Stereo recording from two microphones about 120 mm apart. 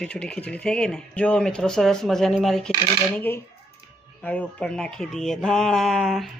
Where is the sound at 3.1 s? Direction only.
15° left (ahead or behind); by 6.3 s centre (ahead or behind).